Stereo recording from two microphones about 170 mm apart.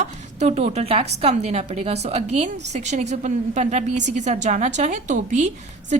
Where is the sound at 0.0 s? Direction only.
45° right (ahead or behind).